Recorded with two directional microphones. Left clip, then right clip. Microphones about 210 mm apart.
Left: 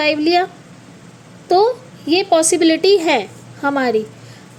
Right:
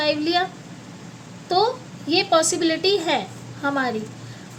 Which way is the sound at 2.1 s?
30° left (ahead or behind).